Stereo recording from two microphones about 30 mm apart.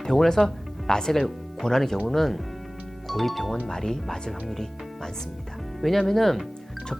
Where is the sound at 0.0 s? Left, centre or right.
Centre.